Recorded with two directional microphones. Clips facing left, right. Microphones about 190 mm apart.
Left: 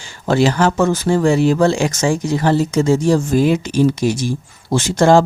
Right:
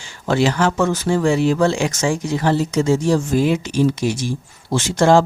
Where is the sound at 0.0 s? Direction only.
40° left (ahead or behind).